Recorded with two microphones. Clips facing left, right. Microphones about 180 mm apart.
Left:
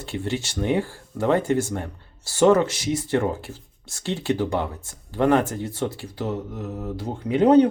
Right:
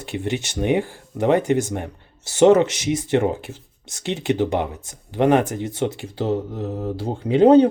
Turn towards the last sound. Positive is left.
turn(degrees=-30)  # may be behind; listen again after turning